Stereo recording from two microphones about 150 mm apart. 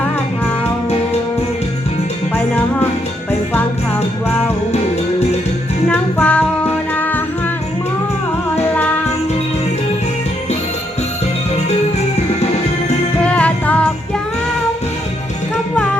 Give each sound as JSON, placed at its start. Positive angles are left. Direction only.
{"t": 5.9, "sound": "music", "side_deg": 10}
{"t": 11.7, "sound": "music", "side_deg": 45}
{"t": 13.2, "sound": "music", "side_deg": 10}